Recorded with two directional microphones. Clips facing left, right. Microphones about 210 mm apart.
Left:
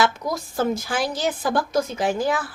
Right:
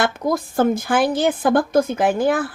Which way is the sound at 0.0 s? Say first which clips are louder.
Right 3 dB; 55° right (ahead or behind).